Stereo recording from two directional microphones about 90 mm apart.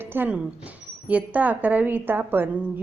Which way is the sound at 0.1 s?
20° right (ahead or behind).